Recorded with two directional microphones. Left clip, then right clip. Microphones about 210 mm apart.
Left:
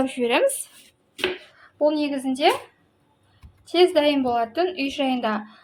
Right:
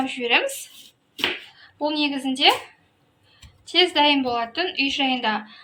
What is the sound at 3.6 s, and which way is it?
A woman's voice, 40° left (ahead or behind).